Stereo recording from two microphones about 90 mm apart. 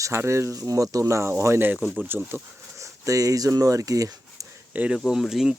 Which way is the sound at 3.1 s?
40° right (ahead or behind).